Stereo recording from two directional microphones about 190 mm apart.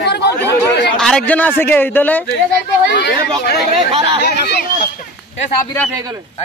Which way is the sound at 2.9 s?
65° left (ahead or behind).